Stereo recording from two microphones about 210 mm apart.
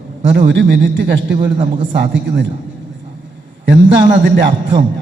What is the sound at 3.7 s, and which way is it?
Speech, 55° right (ahead or behind).